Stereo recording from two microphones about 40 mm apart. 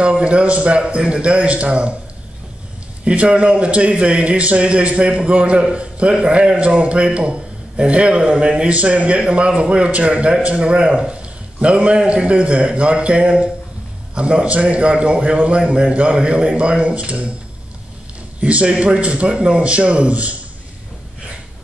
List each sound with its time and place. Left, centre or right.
0.0 s a man's voice: right
3.1 s a man's voice: right
15.6 s a man's voice: right
15.9 s a man's voice: right
18.4 s a man's voice: right